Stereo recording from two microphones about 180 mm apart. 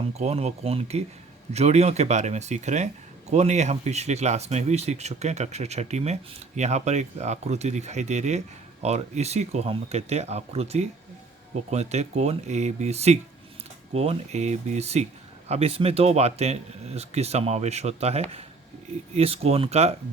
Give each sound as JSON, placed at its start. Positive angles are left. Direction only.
{"t": 0.1, "sound": "speech", "side_deg": -35}